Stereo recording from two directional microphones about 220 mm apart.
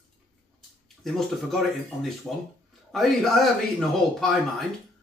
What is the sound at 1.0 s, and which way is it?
Speech, centre (ahead or behind).